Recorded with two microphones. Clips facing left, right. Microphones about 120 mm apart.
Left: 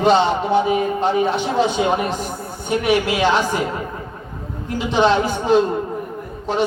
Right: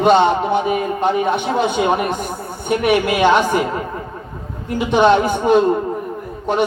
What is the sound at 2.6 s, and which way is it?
Speech, 55° right (ahead or behind).